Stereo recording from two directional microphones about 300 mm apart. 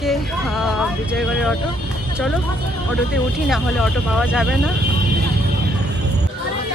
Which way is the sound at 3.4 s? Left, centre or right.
Centre.